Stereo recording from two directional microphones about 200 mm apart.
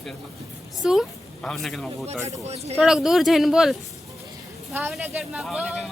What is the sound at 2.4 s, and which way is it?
Speech, 30° right (ahead or behind).